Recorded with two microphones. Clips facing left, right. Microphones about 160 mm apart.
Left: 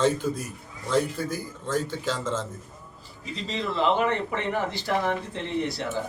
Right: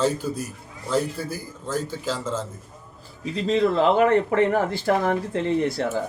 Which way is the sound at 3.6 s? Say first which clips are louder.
Right 5 dB; 45° right (ahead or behind).